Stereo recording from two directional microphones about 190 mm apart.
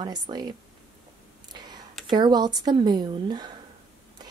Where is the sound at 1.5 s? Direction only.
20° right (ahead or behind).